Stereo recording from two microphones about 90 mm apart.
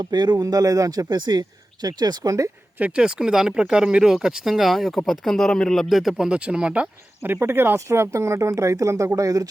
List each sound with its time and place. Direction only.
0.0 s speech: 50° right (ahead or behind)
0.4 s speech: 40° right (ahead or behind)
2.7 s speech: 15° right (ahead or behind)
7.3 s speech: 25° right (ahead or behind)